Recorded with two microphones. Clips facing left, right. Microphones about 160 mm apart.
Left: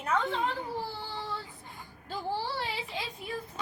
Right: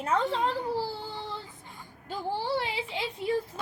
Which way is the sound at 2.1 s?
15° right (ahead or behind).